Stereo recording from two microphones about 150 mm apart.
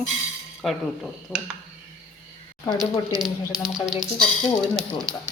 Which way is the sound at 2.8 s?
30° right (ahead or behind).